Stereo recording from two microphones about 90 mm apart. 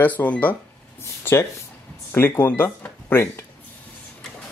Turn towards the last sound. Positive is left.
turn(degrees=25)  # may be behind; listen again after turning